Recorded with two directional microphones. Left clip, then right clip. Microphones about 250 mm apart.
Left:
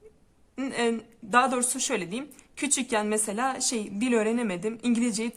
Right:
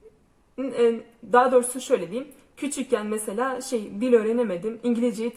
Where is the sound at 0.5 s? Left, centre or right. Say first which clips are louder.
Right 6 dB; left.